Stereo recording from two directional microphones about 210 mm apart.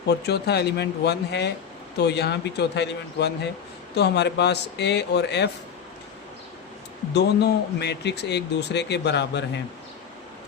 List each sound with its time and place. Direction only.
0.1 s speech: 50° left (ahead or behind)
7.1 s speech: 55° left (ahead or behind)